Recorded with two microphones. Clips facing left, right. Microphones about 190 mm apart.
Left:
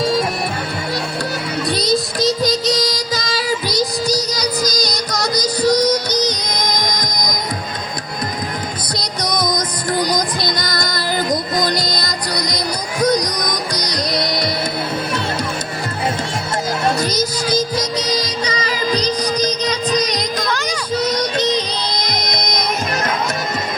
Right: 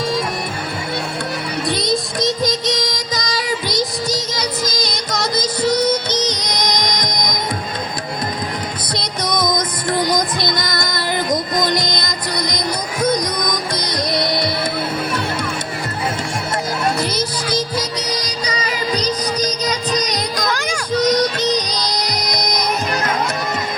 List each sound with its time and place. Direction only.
1.6 s music: 20° right (ahead or behind)
9.0 s music: 25° right (ahead or behind)
13.7 s music: 25° right (ahead or behind)
17.0 s music: 30° right (ahead or behind)
18.0 s music: 30° left (ahead or behind)
21.5 s music: 10° right (ahead or behind)